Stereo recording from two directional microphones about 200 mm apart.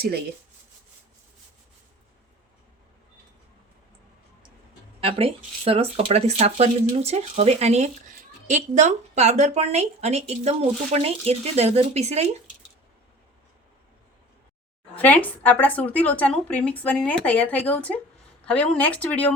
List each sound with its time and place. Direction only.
4.9 s speech: 30° right (ahead or behind)
14.9 s speech: 10° left (ahead or behind)